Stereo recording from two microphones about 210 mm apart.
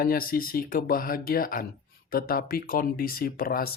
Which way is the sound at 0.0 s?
45° left (ahead or behind).